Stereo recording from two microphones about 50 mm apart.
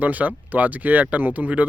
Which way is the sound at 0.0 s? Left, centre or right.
Right.